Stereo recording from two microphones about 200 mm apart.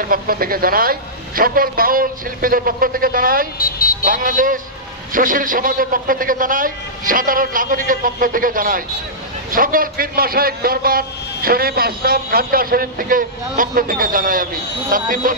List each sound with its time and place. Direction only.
0.1 s a man's voice: 45° right (ahead or behind)
3.5 s speech: 45° left (ahead or behind)
4.0 s a man's voice: 45° right (ahead or behind)